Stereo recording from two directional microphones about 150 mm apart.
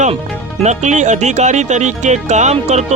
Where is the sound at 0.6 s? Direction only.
50° right (ahead or behind).